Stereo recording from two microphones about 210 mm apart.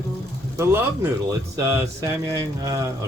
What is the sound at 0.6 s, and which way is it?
Speech, 15° right (ahead or behind).